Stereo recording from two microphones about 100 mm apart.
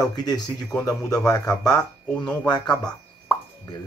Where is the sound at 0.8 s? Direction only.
40° left (ahead or behind).